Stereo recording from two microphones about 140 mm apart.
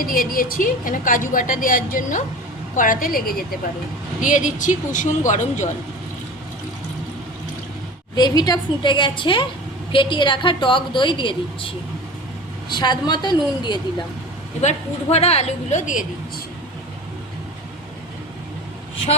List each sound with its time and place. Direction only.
0.0 s a woman's voice: 85° left
4.2 s speech: 65° left (ahead or behind)
8.1 s a woman's voice: 30° left (ahead or behind)
14.6 s a woman's voice: 50° left (ahead or behind)